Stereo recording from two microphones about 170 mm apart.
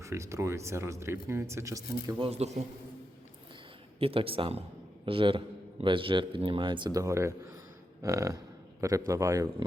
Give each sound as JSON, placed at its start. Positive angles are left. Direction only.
{"t": 0.0, "sound": "speech", "side_deg": -15}
{"t": 4.0, "sound": "speech", "side_deg": -35}